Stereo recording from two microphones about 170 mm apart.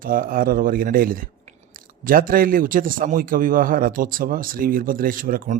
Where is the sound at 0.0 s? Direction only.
55° right (ahead or behind).